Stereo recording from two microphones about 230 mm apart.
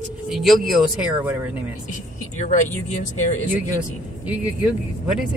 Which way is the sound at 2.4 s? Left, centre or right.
Left.